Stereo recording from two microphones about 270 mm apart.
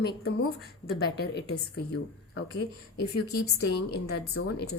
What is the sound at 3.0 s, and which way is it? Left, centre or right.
A woman's voice, left.